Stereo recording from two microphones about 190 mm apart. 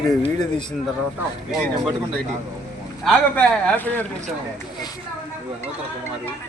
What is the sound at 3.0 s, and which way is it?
A man's voice, 5° left (ahead or behind).